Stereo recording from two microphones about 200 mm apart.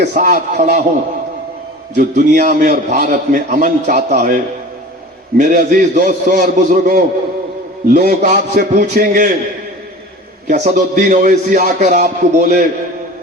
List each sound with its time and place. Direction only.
0.0 s a man's voice: 40° right (ahead or behind)
2.0 s a man's voice: 40° right (ahead or behind)
5.4 s a man's voice: 40° right (ahead or behind)
10.4 s a man's voice: 35° right (ahead or behind)